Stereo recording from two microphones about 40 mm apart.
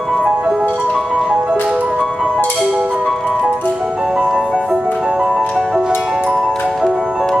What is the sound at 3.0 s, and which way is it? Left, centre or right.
Music, centre.